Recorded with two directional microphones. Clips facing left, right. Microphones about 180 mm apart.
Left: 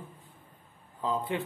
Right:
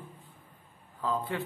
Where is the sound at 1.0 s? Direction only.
20° left (ahead or behind).